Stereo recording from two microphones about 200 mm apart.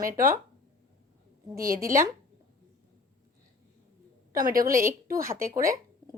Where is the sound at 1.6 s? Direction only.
45° right (ahead or behind).